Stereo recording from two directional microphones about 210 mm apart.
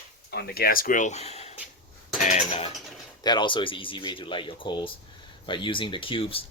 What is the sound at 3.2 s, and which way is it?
Speech, 20° left (ahead or behind).